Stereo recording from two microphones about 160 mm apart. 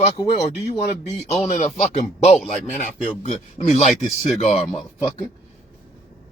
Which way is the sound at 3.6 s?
40° left (ahead or behind).